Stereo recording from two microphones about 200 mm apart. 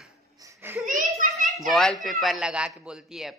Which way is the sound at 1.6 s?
Centre (ahead or behind).